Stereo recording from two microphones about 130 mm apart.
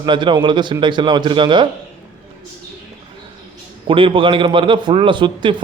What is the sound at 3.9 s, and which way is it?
Speech, 45° right (ahead or behind).